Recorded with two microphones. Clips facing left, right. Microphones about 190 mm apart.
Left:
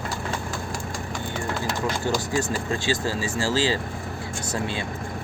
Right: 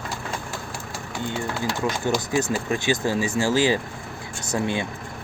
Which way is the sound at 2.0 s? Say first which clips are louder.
Right 3 dB; 15° right (ahead or behind).